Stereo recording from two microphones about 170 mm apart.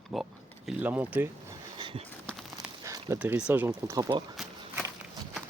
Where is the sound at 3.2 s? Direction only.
5° right (ahead or behind).